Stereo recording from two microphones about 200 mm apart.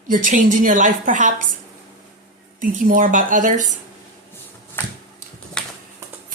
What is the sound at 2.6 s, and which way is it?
Speech, 40° right (ahead or behind).